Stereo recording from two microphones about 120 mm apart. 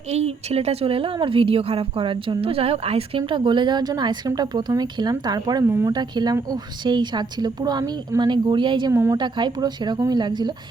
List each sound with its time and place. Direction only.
0.1 s a woman's voice: 60° right (ahead or behind); by 5.6 s 35° right (ahead or behind)
5.6 s speech: 20° right (ahead or behind)
5.9 s a woman's voice: 35° right (ahead or behind)
8.9 s speech: 25° right (ahead or behind)
9.1 s a woman's voice: 40° right (ahead or behind)